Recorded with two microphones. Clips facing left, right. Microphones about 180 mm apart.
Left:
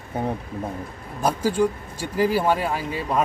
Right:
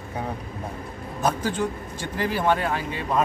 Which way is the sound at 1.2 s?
10° left (ahead or behind).